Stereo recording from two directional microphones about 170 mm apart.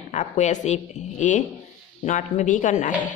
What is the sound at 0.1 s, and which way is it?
Speech, 45° left (ahead or behind).